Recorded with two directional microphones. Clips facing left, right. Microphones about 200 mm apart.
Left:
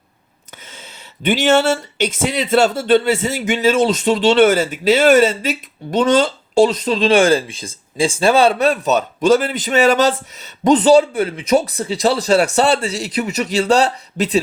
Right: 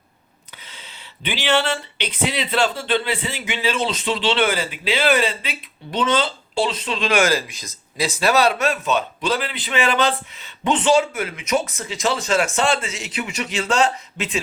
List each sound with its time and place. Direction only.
0.5 s speech: 45° left (ahead or behind)